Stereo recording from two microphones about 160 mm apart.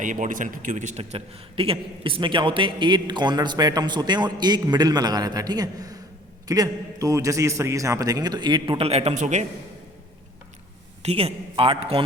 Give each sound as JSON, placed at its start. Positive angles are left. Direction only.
{"t": 0.0, "sound": "a man's voice", "side_deg": -55}
{"t": 11.0, "sound": "a man's voice", "side_deg": -40}